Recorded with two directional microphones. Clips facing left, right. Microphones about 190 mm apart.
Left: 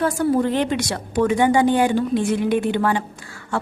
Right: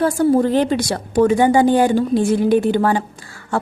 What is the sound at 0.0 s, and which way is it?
A woman's voice, 35° right (ahead or behind).